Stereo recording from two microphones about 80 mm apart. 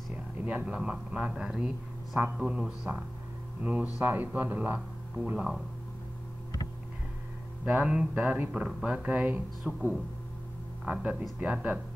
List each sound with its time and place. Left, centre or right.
0.5 s a man's voice: centre
3.6 s speech: centre
7.6 s speech: centre
9.6 s a man's voice: centre
10.9 s speech: centre